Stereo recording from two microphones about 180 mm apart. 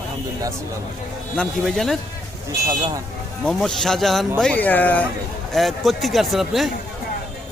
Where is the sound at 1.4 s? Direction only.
Centre (ahead or behind).